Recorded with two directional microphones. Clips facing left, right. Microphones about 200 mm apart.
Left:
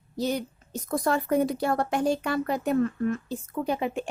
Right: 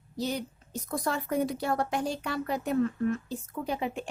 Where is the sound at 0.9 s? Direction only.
55° left (ahead or behind).